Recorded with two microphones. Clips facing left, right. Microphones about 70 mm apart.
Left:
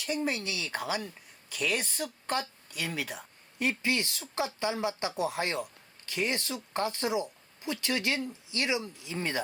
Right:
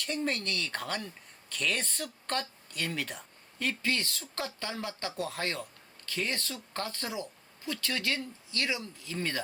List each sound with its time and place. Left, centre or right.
0.0 s speech: centre
3.6 s speech: centre